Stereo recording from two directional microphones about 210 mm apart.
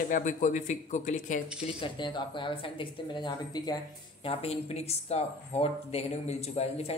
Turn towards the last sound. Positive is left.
turn(degrees=30)  # may be behind; listen again after turning